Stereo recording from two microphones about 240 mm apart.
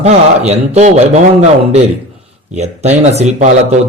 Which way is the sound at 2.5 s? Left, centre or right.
Right.